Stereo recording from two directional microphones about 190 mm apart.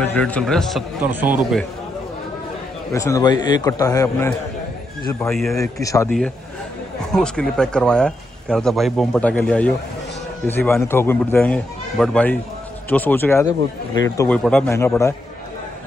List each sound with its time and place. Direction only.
0.0 s speech: 10° left (ahead or behind)
1.2 s speech: 10° right (ahead or behind)
2.9 s a man's voice: 15° left (ahead or behind)
5.3 s speech: centre (ahead or behind)
5.6 s a man's voice: 15° left (ahead or behind)
6.0 s a man's voice: 5° left (ahead or behind)